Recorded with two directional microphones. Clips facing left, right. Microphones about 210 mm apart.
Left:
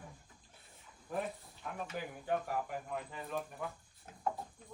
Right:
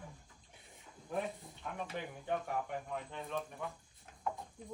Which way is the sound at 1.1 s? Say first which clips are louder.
Even; centre (ahead or behind).